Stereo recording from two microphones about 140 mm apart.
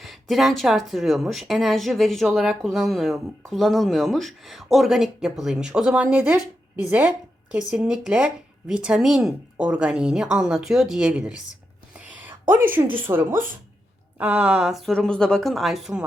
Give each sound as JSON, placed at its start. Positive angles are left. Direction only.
{"t": 0.0, "sound": "speech", "side_deg": 0}
{"t": 7.5, "sound": "speech", "side_deg": -5}
{"t": 11.9, "sound": "a sound", "side_deg": -10}
{"t": 12.7, "sound": "speech", "side_deg": -15}